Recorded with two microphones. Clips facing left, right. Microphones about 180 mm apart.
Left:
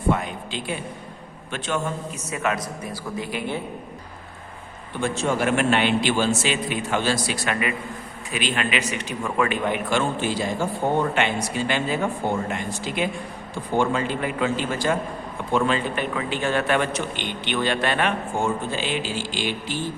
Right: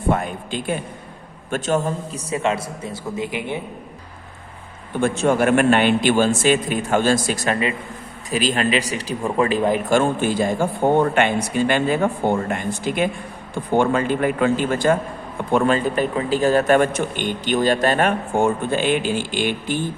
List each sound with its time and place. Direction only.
0.1 s a man's voice: 50° right (ahead or behind)
2.3 s a man's voice: 25° right (ahead or behind)
4.9 s a man's voice: 50° right (ahead or behind)
18.3 s a man's voice: 55° right (ahead or behind)